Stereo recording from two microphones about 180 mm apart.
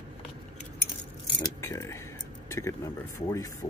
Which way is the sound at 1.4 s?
15° left (ahead or behind).